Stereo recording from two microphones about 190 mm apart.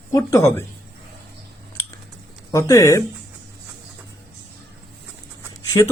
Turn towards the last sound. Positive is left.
turn(degrees=15)  # may be behind; listen again after turning